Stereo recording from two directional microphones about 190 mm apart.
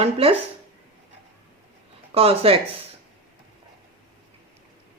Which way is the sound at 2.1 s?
30° right (ahead or behind).